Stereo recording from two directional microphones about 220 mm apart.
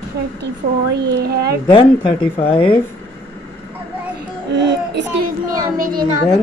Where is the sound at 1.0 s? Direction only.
45° right (ahead or behind).